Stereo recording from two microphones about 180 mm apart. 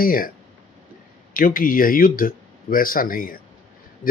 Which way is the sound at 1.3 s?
50° left (ahead or behind).